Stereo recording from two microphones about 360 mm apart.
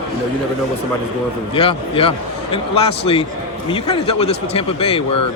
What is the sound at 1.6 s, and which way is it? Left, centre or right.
A man's voice, centre.